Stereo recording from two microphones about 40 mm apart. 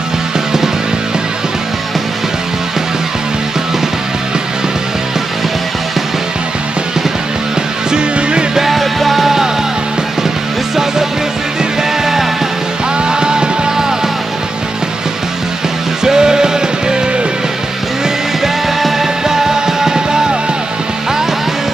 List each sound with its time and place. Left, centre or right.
7.9 s music: right
8.5 s music: centre
13.1 s music: right
16.0 s music: centre
18.4 s music: centre